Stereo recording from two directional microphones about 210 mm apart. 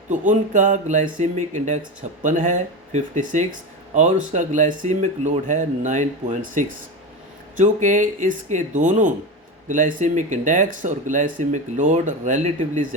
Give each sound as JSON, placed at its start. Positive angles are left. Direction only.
{"t": 0.1, "sound": "speech", "side_deg": -35}